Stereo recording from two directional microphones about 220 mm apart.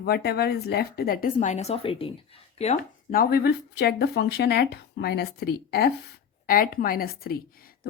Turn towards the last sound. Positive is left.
turn(degrees=40)  # may be behind; listen again after turning